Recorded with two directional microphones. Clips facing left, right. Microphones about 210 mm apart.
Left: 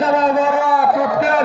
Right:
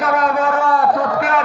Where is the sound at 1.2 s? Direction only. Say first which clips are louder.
Left 3 dB; 30° left (ahead or behind).